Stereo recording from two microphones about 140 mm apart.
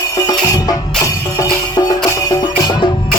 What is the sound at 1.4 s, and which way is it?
Music, 25° left (ahead or behind).